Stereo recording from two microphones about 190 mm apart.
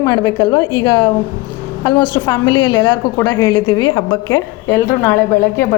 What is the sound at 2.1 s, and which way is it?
A woman's voice, 15° left (ahead or behind).